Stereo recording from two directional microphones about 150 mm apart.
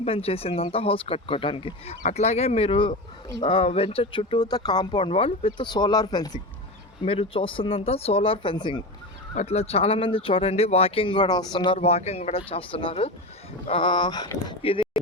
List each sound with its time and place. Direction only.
0.0 s speech: 40° left (ahead or behind)
7.0 s speech: 40° left (ahead or behind)
9.3 s speech: 50° left (ahead or behind)